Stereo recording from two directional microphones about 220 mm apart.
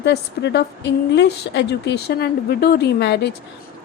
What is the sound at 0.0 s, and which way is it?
A woman's voice, 50° left (ahead or behind).